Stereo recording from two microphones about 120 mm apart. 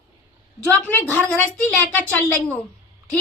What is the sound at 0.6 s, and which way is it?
A woman's voice, 15° left (ahead or behind).